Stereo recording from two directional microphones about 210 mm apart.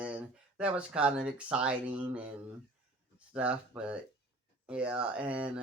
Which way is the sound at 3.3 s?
5° right (ahead or behind).